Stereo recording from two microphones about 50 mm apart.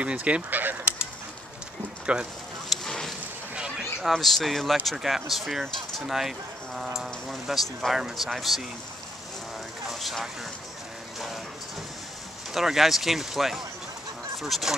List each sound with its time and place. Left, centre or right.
0.0 s speech: right
0.5 s fowl: right
2.1 s speech: right
2.7 s a sound: centre
4.1 s speech: centre
9.8 s a sound: centre
12.5 s speech: centre